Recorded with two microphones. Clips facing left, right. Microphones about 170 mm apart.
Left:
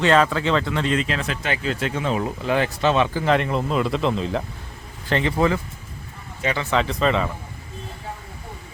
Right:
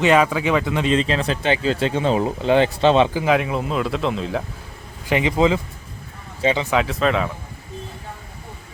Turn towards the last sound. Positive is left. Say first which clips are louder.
# right 1 dB
turn(degrees=0)  # may be behind; listen again after turning